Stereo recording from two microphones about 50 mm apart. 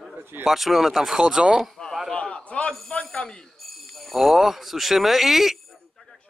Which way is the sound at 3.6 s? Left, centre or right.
Centre.